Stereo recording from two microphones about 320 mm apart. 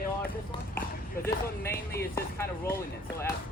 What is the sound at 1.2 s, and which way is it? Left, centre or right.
Speech, centre.